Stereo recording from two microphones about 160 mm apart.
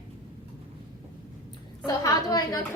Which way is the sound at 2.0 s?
25° left (ahead or behind).